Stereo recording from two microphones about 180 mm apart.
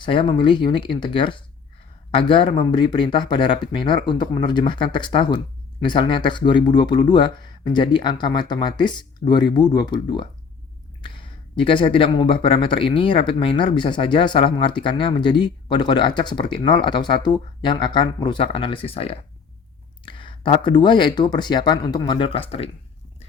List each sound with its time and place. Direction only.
0.0 s speech: 25° left (ahead or behind)